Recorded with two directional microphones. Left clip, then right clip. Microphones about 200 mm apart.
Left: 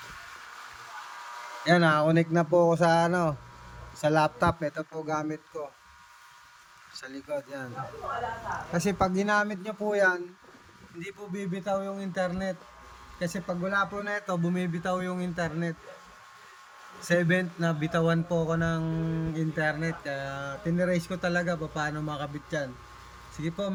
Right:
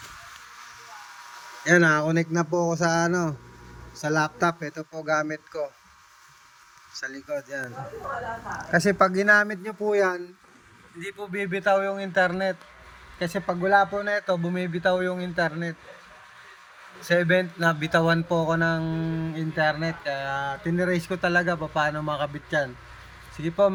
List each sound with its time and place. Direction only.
1.7 s a man's voice: 10° left (ahead or behind)
7.0 s a man's voice: 5° left (ahead or behind)
8.8 s a man's voice: centre (ahead or behind)
11.0 s speech: 15° left (ahead or behind)
11.3 s a man's voice: centre (ahead or behind)
11.7 s speech: 35° right (ahead or behind)
11.9 s a man's voice: centre (ahead or behind)
17.1 s speech: 10° left (ahead or behind)